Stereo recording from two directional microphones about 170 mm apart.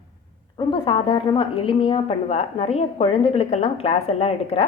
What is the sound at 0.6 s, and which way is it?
A woman's voice, 30° left (ahead or behind).